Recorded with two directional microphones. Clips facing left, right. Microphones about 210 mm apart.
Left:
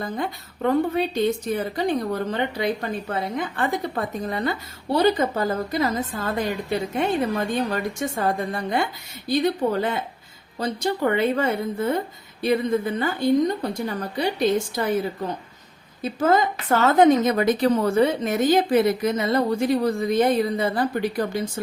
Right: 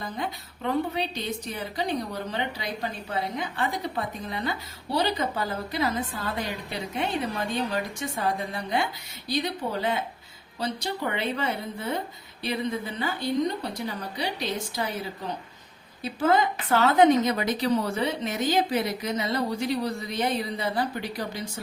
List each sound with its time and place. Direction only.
0.0 s a woman's voice: 50° left (ahead or behind)
16.0 s a woman's voice: 45° left (ahead or behind)